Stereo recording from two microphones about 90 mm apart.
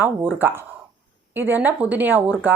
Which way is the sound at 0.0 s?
25° right (ahead or behind).